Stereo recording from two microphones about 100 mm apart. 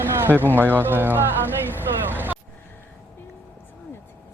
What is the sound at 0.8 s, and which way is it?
Speech, 20° right (ahead or behind).